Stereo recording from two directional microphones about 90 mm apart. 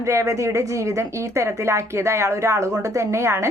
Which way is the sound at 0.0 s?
35° right (ahead or behind).